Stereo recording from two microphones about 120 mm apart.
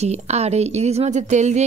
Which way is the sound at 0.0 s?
65° right (ahead or behind).